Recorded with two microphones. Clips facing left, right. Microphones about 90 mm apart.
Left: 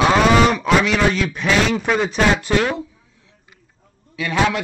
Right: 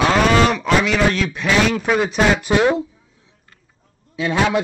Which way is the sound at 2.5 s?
20° right (ahead or behind).